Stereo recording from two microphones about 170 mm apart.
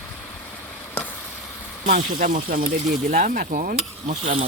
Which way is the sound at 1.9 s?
50° right (ahead or behind).